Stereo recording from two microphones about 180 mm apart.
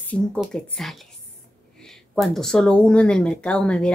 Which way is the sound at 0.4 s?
Centre (ahead or behind).